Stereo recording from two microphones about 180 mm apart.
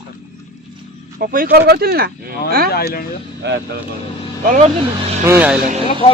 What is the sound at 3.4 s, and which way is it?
Speech, 70° right (ahead or behind).